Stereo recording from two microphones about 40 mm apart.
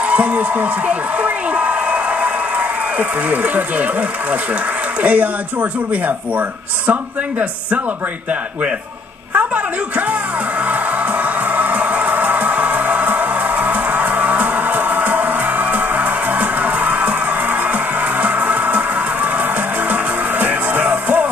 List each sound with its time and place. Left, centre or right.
0.0 s speech: right
9.3 s a woman's voice: right
10.6 s music: right